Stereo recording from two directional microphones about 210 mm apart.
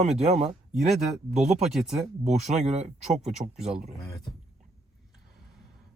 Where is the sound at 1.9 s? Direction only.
30° right (ahead or behind).